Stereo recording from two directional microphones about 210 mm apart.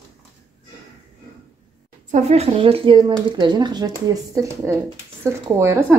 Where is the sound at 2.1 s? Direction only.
30° right (ahead or behind); by 6.0 s 10° right (ahead or behind).